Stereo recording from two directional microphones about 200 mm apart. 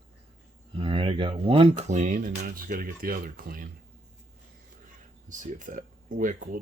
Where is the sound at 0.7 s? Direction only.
25° right (ahead or behind); by 3.7 s 45° right (ahead or behind).